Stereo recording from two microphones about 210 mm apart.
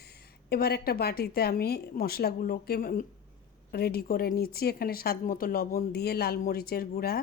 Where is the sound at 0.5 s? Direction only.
50° left (ahead or behind).